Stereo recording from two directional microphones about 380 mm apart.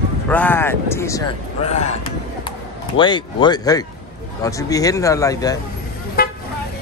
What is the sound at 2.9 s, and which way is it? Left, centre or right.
Speech, centre.